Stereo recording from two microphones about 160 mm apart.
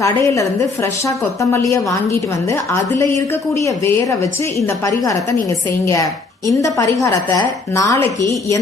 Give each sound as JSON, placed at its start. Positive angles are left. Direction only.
{"t": 0.0, "sound": "a woman's voice", "side_deg": 20}